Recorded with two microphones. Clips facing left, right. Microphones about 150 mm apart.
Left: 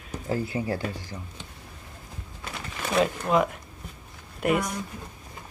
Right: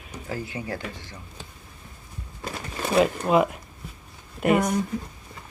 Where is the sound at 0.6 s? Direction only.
35° left (ahead or behind).